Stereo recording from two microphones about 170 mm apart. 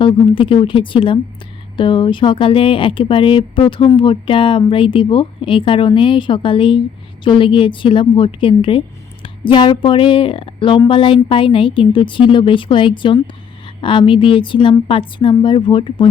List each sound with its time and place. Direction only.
0.0 s speech: 30° left (ahead or behind)